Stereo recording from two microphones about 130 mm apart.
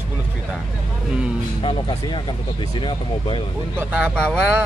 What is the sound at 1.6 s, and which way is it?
Speech, 35° left (ahead or behind).